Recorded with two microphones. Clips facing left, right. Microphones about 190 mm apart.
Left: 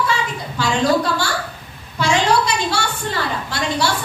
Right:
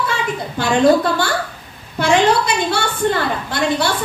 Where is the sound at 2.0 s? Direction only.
55° right (ahead or behind).